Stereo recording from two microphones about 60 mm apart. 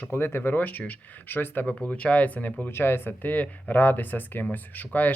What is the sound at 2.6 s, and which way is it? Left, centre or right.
Speech, left.